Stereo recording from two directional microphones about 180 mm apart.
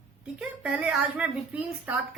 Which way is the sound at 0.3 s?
5° right (ahead or behind).